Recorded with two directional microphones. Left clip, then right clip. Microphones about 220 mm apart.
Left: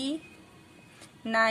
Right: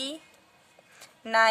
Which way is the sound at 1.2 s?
40° right (ahead or behind).